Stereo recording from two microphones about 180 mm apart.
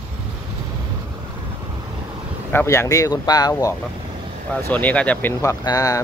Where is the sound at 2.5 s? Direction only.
15° left (ahead or behind).